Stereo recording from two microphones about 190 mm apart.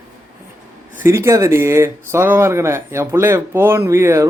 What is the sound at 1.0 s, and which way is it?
Speech, 15° right (ahead or behind).